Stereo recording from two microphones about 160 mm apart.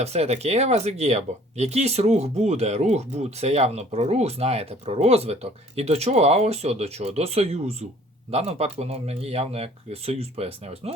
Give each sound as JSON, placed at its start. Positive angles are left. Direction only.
{"t": 0.0, "sound": "speech", "side_deg": -40}